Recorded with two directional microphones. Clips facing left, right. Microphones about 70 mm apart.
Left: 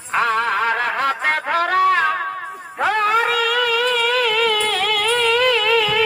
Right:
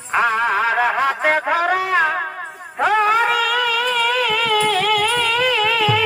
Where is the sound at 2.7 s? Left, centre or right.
Centre.